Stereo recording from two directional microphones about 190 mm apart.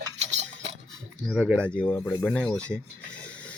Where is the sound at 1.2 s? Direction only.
Centre (ahead or behind).